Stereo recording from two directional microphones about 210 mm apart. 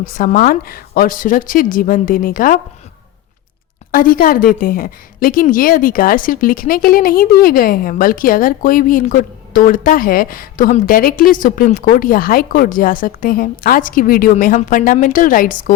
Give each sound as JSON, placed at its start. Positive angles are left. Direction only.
{"t": 0.0, "sound": "a woman's voice", "side_deg": 40}
{"t": 3.9, "sound": "a woman's voice", "side_deg": 40}